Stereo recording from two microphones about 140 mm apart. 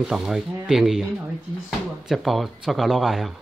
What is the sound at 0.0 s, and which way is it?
Speech, 5° right (ahead or behind).